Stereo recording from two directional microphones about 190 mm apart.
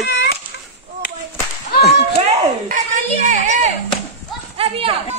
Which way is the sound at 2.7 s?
40° right (ahead or behind).